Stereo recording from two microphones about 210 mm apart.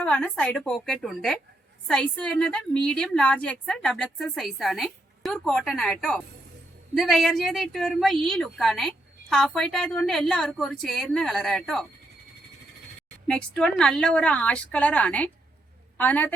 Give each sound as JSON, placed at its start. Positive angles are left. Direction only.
{"t": 0.0, "sound": "a woman's voice", "side_deg": 5}
{"t": 13.2, "sound": "a woman's voice", "side_deg": 5}